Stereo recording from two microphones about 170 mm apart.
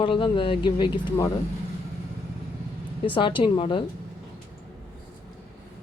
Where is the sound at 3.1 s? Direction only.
30° left (ahead or behind).